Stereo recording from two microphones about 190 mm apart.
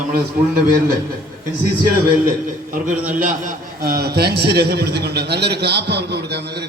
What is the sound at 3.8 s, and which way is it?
A man's voice, 55° right (ahead or behind).